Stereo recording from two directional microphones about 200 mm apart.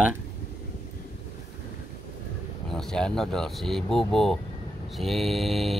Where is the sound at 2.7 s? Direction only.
5° left (ahead or behind).